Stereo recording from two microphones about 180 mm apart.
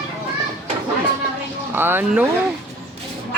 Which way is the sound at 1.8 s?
10° right (ahead or behind).